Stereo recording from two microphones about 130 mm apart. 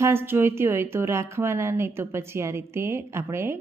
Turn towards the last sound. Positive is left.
turn(degrees=-20)  # may be behind; listen again after turning